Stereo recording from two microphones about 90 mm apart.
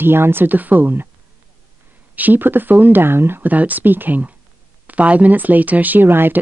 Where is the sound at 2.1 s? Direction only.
20° right (ahead or behind).